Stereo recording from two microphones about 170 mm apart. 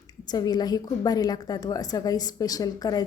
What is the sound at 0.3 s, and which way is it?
A woman's voice, 25° left (ahead or behind).